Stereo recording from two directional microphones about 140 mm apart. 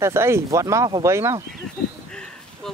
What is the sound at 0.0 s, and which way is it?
Speech, 20° right (ahead or behind).